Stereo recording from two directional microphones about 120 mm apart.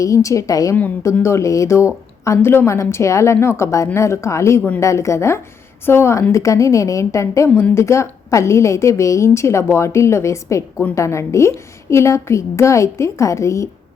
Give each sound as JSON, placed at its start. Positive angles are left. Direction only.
{"t": 0.0, "sound": "a woman's voice", "side_deg": 25}